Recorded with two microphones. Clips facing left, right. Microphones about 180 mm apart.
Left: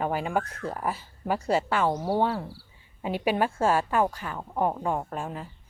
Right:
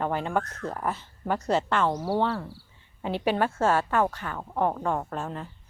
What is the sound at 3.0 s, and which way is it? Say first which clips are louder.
Speech: even; 10° left (ahead or behind).